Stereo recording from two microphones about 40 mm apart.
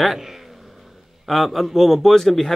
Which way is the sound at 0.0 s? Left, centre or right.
Centre.